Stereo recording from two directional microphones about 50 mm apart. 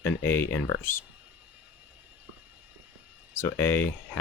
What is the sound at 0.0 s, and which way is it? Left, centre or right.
Speech, left.